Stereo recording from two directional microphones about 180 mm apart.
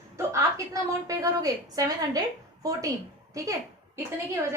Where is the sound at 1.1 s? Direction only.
20° right (ahead or behind).